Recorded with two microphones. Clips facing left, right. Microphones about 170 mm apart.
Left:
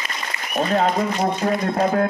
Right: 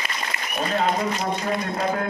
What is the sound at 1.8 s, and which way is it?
Speech, 45° left (ahead or behind).